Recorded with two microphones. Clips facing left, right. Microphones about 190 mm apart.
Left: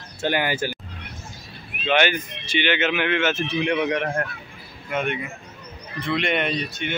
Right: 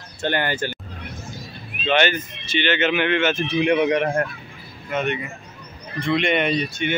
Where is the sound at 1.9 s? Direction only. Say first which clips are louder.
Right 1 dB; 10° left (ahead or behind).